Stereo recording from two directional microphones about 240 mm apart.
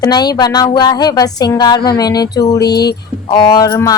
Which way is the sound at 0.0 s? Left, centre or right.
Centre.